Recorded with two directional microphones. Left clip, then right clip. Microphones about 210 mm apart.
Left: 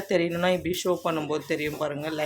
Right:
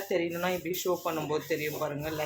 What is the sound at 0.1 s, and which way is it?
Speech, 45° left (ahead or behind).